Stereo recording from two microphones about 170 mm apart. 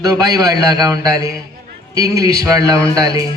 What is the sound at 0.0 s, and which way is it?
A man's voice, 20° right (ahead or behind).